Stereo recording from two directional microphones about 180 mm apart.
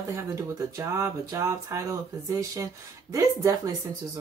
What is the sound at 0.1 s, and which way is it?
Speech, 15° right (ahead or behind).